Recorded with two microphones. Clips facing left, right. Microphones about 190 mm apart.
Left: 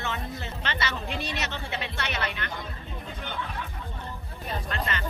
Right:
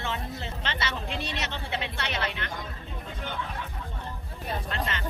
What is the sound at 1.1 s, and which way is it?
Speech, 30° right (ahead or behind).